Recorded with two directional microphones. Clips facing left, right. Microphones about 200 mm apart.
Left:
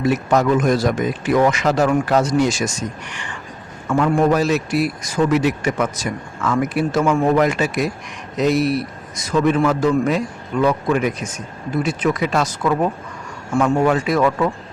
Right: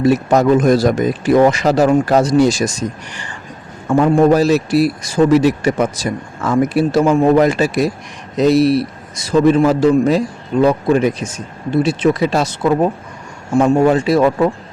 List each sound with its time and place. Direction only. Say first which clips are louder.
0.0 s a man's voice: right 5 dB; 35° right (ahead or behind)